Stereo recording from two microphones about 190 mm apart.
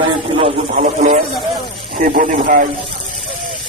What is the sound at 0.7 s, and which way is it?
Speech, 45° right (ahead or behind).